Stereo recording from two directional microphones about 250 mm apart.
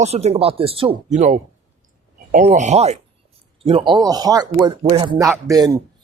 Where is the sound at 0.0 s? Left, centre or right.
Right.